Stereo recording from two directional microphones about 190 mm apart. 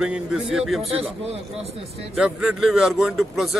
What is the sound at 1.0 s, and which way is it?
Speech, 30° right (ahead or behind).